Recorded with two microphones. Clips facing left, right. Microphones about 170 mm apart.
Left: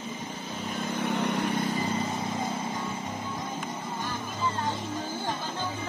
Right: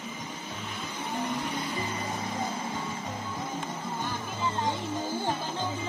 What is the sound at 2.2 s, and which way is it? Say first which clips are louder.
Vehicle: left 2 dB; 25° left (ahead or behind).